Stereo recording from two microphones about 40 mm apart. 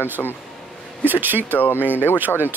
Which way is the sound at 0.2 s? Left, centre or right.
Left.